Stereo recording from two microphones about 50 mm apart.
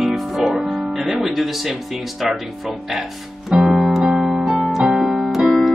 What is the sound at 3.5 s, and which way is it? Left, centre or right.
Music, centre.